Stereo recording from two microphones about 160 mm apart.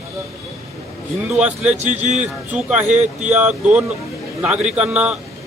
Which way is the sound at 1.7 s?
45° right (ahead or behind).